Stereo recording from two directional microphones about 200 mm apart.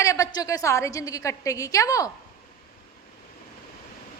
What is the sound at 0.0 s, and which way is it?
A woman's voice, 15° left (ahead or behind).